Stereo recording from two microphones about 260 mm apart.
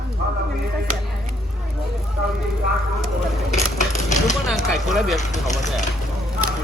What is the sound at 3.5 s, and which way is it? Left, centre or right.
Vehicle, left.